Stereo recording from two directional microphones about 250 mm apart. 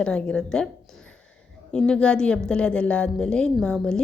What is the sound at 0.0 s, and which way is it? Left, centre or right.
A woman's voice, centre.